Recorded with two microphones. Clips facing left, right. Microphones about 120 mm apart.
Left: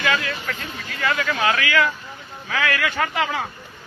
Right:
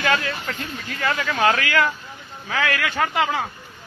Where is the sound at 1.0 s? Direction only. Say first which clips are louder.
Right 1 dB; 30° right (ahead or behind).